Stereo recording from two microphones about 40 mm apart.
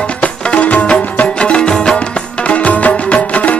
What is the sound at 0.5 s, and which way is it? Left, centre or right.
Music, left.